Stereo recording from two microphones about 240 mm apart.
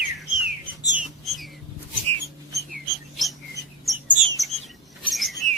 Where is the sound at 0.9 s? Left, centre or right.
Centre.